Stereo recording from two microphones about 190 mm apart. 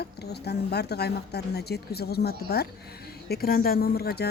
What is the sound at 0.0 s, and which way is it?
Speech, 60° left (ahead or behind).